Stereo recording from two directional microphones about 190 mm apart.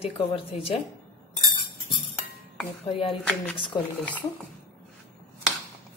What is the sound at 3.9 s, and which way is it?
Speech, 10° left (ahead or behind).